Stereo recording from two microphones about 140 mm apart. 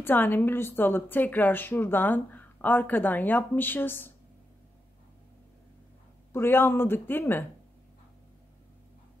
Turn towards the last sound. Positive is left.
turn(degrees=15)  # may be behind; listen again after turning